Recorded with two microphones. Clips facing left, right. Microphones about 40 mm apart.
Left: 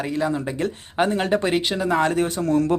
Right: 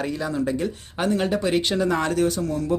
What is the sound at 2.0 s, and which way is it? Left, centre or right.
Speech, left.